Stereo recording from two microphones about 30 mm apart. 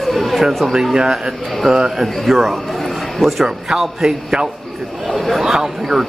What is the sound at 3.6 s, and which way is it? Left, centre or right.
Speech, centre.